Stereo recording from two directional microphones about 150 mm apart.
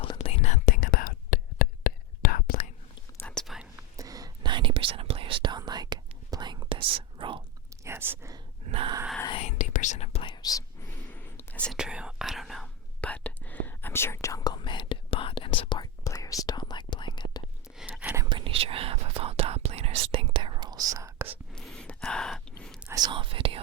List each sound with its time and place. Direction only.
0.0 s whispering: 40° left (ahead or behind); by 2.6 s 80° left
3.2 s whispering: 10° left (ahead or behind)
3.4 s whispering: 5° right (ahead or behind)
3.9 s whispering: 25° right (ahead or behind)
7.9 s whispering: 20° right (ahead or behind)
8.6 s a sound: 40° right (ahead or behind)
9.3 s whispering: 50° left (ahead or behind)
10.2 s whispering: 25° left (ahead or behind)
11.1 s whispering: 10° left (ahead or behind)
11.7 s whispering: 5° right (ahead or behind); by 17.4 s 30° left (ahead or behind)
17.7 s whispering: 5° right (ahead or behind)
18.2 s whispering: 30° right (ahead or behind)
21.5 s gasp: 5° left (ahead or behind)
22.9 s whispering: 25° right (ahead or behind)